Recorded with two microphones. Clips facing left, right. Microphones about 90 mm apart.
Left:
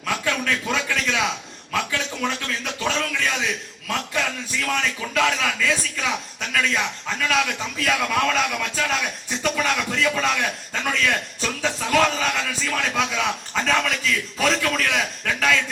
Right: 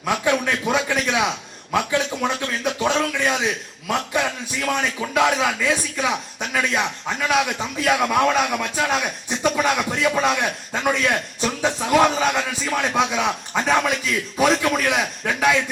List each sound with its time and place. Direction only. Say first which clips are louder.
0.0 s a man's voice: right 4 dB; 20° right (ahead or behind)
4.6 s a man's voice: right 3 dB; 25° right (ahead or behind)